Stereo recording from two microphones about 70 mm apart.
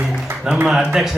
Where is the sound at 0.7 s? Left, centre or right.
Centre.